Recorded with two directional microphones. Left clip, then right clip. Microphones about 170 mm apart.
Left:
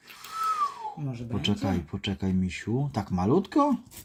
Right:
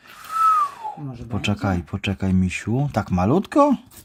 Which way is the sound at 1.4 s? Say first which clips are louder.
Right 5 dB; 40° right (ahead or behind).